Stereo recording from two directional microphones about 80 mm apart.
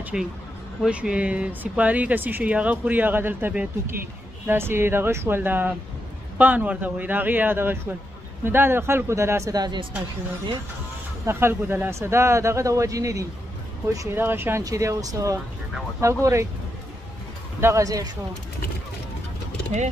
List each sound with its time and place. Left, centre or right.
0.1 s speech: centre; by 9.5 s right
9.5 s speech: right
11.2 s speech: right
14.1 s speech: right
14.6 s speech: right
17.6 s speech: right
17.8 s speech: right